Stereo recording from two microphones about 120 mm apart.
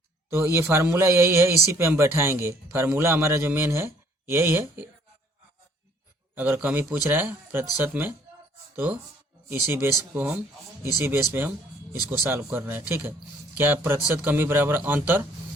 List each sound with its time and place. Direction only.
0.5 s a man's voice: 20° right (ahead or behind)
6.3 s a man's voice: 15° right (ahead or behind)